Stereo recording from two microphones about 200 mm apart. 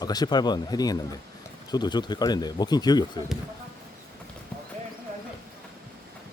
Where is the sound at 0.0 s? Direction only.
20° left (ahead or behind).